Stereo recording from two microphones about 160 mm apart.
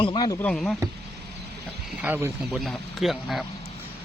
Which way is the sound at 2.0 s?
10° right (ahead or behind).